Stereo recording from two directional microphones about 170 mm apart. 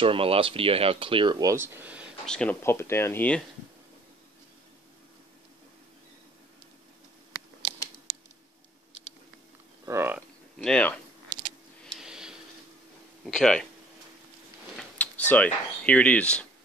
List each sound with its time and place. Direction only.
0.0 s speech: 30° right (ahead or behind); by 2.0 s 10° right (ahead or behind)
2.2 s speech: 5° left (ahead or behind)
9.8 s a sound: 15° right (ahead or behind)
10.6 s speech: 5° left (ahead or behind)
11.8 s a sound: centre (ahead or behind)
13.2 s speech: centre (ahead or behind)
14.8 s speech: 10° left (ahead or behind)